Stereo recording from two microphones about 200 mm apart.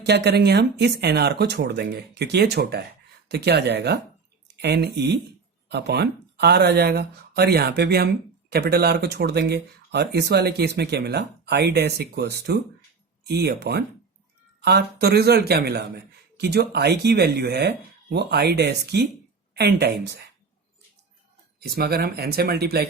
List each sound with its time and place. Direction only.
0.0 s speech: 55° right (ahead or behind)
21.6 s speech: 50° right (ahead or behind)